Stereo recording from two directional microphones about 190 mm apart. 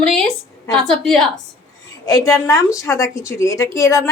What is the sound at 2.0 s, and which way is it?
A woman's voice, 15° left (ahead or behind).